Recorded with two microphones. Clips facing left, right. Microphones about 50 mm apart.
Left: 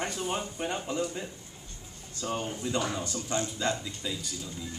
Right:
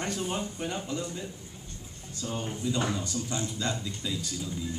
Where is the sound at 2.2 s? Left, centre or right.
Left.